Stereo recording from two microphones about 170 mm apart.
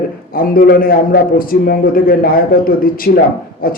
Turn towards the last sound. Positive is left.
turn(degrees=60)  # may be behind; listen again after turning